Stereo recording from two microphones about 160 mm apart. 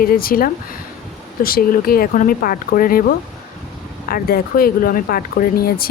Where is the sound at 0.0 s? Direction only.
65° left (ahead or behind).